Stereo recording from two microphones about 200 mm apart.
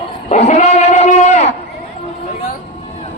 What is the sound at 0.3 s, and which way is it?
Sheep, 35° left (ahead or behind).